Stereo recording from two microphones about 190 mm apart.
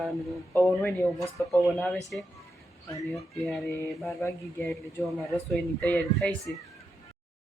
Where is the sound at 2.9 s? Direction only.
15° left (ahead or behind).